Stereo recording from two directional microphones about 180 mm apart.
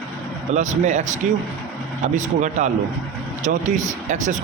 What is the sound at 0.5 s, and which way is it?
Speech, 40° right (ahead or behind).